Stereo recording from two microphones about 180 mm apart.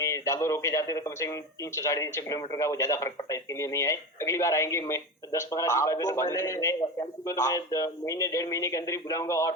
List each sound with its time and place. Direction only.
0.0 s speech: 15° left (ahead or behind)